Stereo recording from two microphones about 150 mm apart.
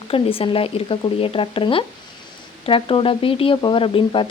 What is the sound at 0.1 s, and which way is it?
Speech, 40° left (ahead or behind).